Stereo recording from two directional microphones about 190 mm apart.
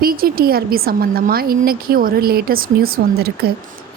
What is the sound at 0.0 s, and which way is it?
A woman's voice, 50° right (ahead or behind).